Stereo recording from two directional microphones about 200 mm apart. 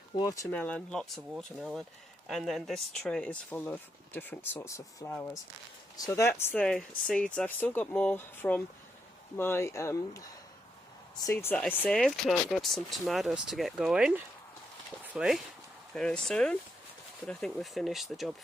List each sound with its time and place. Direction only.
0.1 s speech: 20° left (ahead or behind)
0.5 s speech: 5° left (ahead or behind)